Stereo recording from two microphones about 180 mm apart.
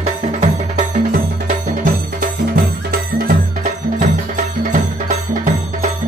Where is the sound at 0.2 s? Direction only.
40° right (ahead or behind).